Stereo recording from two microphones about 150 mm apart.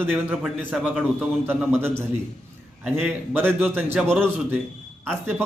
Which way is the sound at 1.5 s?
15° right (ahead or behind).